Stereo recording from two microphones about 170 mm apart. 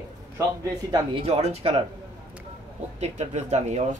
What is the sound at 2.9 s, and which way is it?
Speech, 40° right (ahead or behind).